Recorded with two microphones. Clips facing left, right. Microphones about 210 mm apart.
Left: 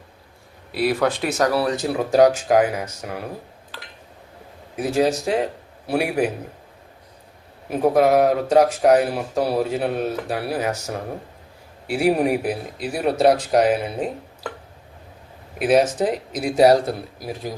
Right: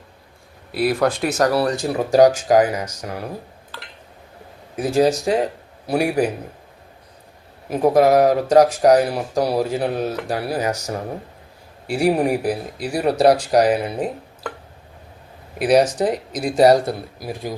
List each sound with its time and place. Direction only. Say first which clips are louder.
0.7 s speech: right 1 dB; centre (ahead or behind)
4.8 s speech: right 3 dB; centre (ahead or behind)
7.9 s speech: right 2 dB; centre (ahead or behind)
15.6 s speech: right 1 dB; centre (ahead or behind)